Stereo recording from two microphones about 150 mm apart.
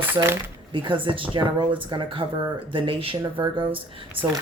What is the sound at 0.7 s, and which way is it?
Speech, 35° right (ahead or behind).